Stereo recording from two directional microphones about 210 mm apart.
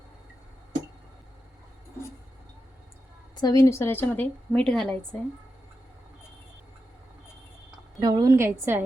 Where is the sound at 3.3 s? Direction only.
20° left (ahead or behind).